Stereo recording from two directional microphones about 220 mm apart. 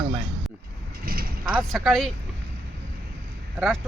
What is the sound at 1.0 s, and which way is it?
Mechanisms, 40° right (ahead or behind).